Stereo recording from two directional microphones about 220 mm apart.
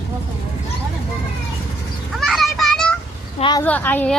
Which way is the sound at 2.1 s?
Centre (ahead or behind).